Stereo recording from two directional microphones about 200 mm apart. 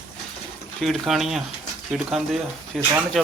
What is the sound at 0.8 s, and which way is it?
Speech, centre (ahead or behind).